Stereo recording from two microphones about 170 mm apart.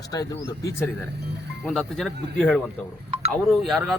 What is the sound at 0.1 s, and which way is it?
Speech, 20° left (ahead or behind).